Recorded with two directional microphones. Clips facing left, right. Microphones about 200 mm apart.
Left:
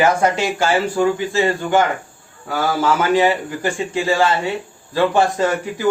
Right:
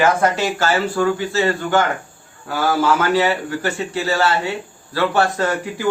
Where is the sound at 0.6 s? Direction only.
10° left (ahead or behind).